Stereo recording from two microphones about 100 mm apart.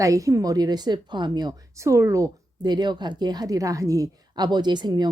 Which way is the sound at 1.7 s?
30° right (ahead or behind).